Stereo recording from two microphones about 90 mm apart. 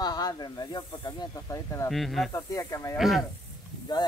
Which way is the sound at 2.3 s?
35° left (ahead or behind).